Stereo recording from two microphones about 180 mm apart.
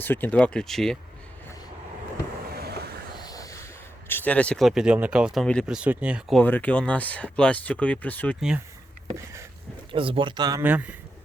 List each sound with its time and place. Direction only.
0.0 s speech: 10° left (ahead or behind)
2.5 s vehicle: 60° right (ahead or behind)
3.2 s a sound: 20° left (ahead or behind)
4.1 s speech: 10° left (ahead or behind)
6.4 s speech: 10° left (ahead or behind)
8.4 s speech: 5° right (ahead or behind)
9.1 s a sound: 15° right (ahead or behind)
9.9 s speech: 30° right (ahead or behind)
10.6 s a sound: 10° right (ahead or behind)